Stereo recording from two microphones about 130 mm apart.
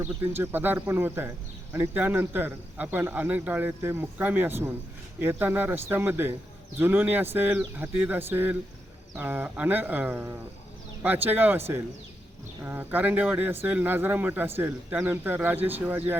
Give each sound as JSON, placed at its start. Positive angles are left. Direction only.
{"t": 0.0, "sound": "a man's voice", "side_deg": -15}